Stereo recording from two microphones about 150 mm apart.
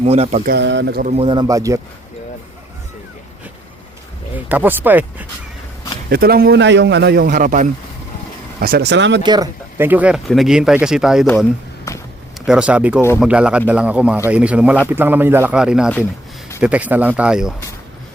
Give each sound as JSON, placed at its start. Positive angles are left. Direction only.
{"t": 0.0, "sound": "speech", "side_deg": -45}
{"t": 0.4, "sound": "speech", "side_deg": -90}
{"t": 1.1, "sound": "speech", "side_deg": -35}
{"t": 1.5, "sound": "speech", "side_deg": -20}
{"t": 4.4, "sound": "speech", "side_deg": -10}
{"t": 6.1, "sound": "speech", "side_deg": -90}
{"t": 8.5, "sound": "speech", "side_deg": -90}
{"t": 9.2, "sound": "speech", "side_deg": -30}
{"t": 9.7, "sound": "speech", "side_deg": -15}
{"t": 11.9, "sound": "a sound", "side_deg": 20}
{"t": 12.5, "sound": "speech", "side_deg": -5}
{"t": 13.0, "sound": "speech", "side_deg": 15}
{"t": 13.2, "sound": "speech", "side_deg": -5}